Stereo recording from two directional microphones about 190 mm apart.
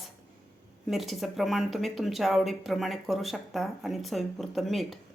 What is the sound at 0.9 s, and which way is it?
Speech, centre (ahead or behind).